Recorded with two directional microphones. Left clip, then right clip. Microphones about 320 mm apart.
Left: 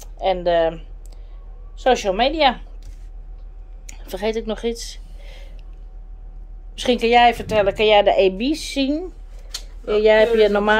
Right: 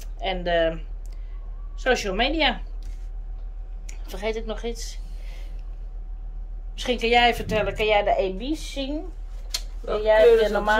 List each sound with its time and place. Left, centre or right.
0.0 s a woman's voice: centre
3.8 s a sound: centre
6.7 s a woman's voice: left